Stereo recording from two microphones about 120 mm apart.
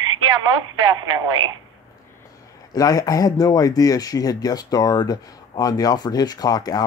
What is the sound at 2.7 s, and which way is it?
Speech, 30° left (ahead or behind).